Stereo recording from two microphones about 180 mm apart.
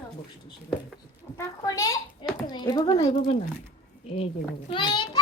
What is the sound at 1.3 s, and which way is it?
A child's voice, 20° left (ahead or behind).